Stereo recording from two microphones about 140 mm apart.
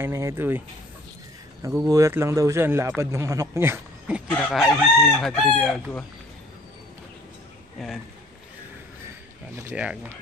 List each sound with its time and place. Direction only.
0.0 s speech: 20° right (ahead or behind)
1.9 s speech: 20° right (ahead or behind)
4.3 s chicken: 5° left (ahead or behind)
7.8 s chicken: centre (ahead or behind)
9.6 s speech: 15° right (ahead or behind)